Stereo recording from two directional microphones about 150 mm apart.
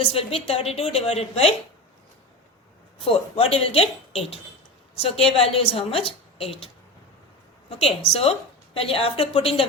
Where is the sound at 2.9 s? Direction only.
40° left (ahead or behind).